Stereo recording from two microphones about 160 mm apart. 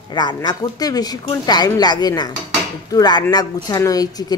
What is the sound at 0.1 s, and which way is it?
A woman's voice, 25° left (ahead or behind).